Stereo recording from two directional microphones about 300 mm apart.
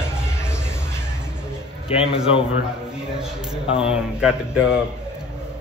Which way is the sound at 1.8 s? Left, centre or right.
Centre.